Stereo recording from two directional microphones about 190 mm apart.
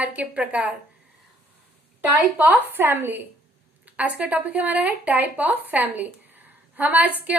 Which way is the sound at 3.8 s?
5° right (ahead or behind).